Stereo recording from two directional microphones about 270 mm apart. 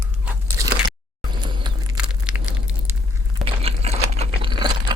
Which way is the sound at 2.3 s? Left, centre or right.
Centre.